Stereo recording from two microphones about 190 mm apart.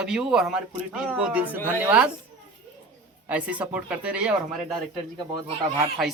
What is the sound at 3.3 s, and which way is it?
Speech, 5° right (ahead or behind).